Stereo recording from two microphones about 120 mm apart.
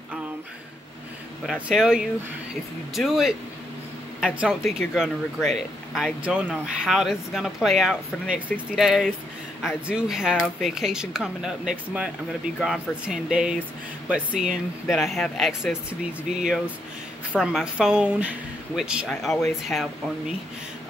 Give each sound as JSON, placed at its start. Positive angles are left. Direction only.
{"t": 1.4, "sound": "speech", "side_deg": -5}
{"t": 12.5, "sound": "speech", "side_deg": 5}
{"t": 13.0, "sound": "a woman's voice", "side_deg": -10}
{"t": 15.9, "sound": "a woman's voice", "side_deg": -10}